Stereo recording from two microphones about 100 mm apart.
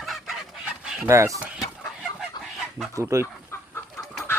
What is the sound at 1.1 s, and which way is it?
Speech, 30° right (ahead or behind).